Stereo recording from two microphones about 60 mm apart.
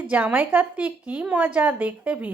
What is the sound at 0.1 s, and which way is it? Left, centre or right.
A woman's voice, right.